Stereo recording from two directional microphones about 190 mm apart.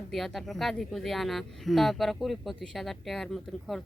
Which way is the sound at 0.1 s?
Centre (ahead or behind).